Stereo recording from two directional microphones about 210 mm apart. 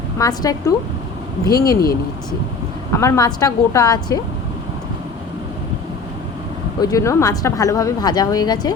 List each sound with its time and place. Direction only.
0.2 s speech: 15° left (ahead or behind)
2.9 s speech: 15° left (ahead or behind)
6.8 s speech: 15° left (ahead or behind)